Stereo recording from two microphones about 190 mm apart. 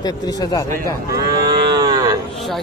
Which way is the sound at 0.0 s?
20° left (ahead or behind).